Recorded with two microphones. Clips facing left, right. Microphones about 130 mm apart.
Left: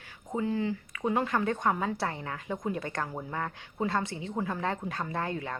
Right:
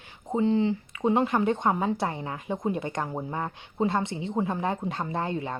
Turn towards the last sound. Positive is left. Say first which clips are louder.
# right 3 dB
turn(degrees=-20)  # may be behind; listen again after turning